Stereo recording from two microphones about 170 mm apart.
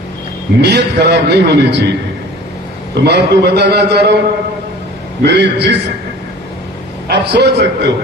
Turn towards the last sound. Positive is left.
turn(degrees=-90)